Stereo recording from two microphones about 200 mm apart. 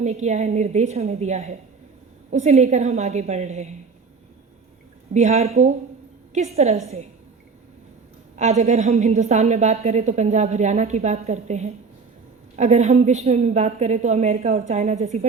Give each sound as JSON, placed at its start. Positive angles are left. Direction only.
{"t": 0.0, "sound": "a woman's voice", "side_deg": -35}
{"t": 5.1, "sound": "a woman's voice", "side_deg": -35}
{"t": 8.4, "sound": "a woman's voice", "side_deg": -35}